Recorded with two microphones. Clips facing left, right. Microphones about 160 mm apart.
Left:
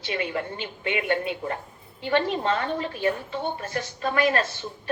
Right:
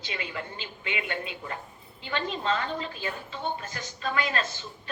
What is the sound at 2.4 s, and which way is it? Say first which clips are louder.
A woman's voice: left 4 dB; 60° left (ahead or behind).